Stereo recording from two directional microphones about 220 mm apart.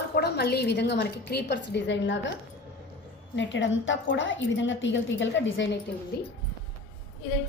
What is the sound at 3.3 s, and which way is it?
A woman's voice, 55° left (ahead or behind).